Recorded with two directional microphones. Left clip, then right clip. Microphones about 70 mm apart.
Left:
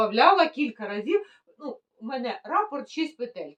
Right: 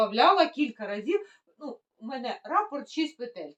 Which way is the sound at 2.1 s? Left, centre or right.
Left.